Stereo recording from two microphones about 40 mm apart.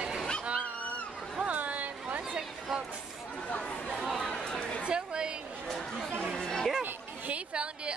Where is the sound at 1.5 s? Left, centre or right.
Right.